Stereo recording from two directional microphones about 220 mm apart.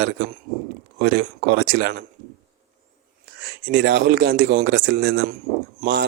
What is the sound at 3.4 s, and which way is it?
Speech, 50° right (ahead or behind).